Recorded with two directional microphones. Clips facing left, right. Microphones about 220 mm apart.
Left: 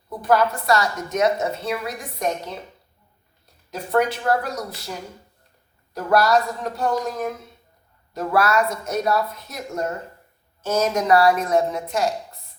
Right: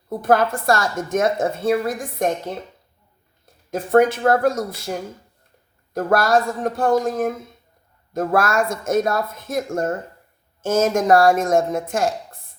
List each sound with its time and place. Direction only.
0.1 s a woman's voice: 50° right (ahead or behind)